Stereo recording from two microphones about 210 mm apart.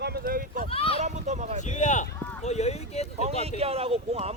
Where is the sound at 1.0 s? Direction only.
35° right (ahead or behind).